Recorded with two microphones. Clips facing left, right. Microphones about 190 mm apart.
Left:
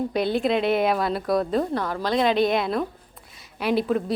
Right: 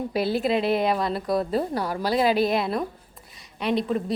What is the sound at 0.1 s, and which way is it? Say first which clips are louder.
A woman's voice: right 2 dB; 5° right (ahead or behind).